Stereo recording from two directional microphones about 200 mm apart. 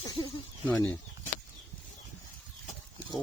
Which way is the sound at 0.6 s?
10° left (ahead or behind).